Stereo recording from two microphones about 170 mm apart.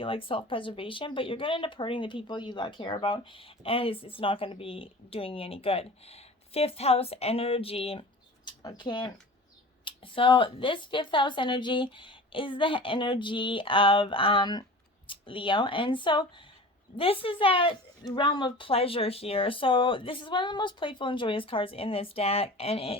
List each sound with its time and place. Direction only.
0.0 s speech: 30° left (ahead or behind)